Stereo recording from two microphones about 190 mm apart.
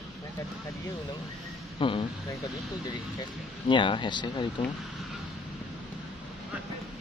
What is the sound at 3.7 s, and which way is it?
Speech, 25° left (ahead or behind).